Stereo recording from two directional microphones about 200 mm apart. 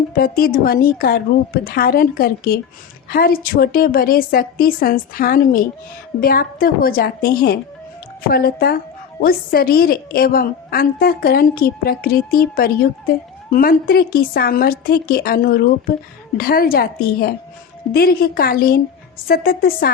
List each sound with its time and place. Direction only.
0.1 s a woman's voice: 45° left (ahead or behind)